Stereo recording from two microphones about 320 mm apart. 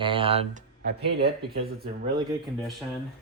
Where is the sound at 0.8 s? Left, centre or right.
Right.